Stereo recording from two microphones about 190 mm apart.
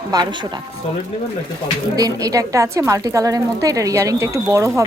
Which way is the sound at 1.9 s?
20° right (ahead or behind).